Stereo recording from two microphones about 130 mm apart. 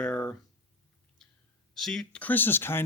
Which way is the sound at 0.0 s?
10° left (ahead or behind).